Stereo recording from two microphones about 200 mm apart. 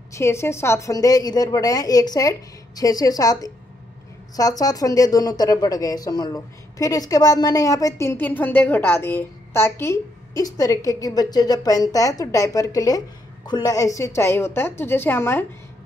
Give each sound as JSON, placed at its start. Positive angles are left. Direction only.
{"t": 0.1, "sound": "a woman's voice", "side_deg": 15}